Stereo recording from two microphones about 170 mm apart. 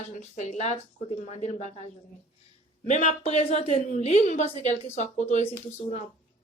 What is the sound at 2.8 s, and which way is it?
Speech, 45° left (ahead or behind).